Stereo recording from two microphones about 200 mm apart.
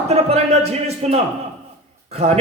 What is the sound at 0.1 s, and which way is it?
A man's voice, 30° right (ahead or behind).